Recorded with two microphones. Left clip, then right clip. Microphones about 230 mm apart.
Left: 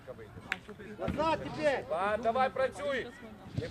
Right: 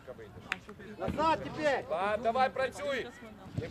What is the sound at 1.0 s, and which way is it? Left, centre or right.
Speech, right.